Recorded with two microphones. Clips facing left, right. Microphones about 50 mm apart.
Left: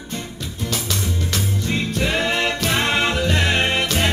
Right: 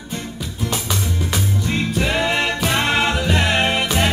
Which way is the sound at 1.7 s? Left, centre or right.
Centre.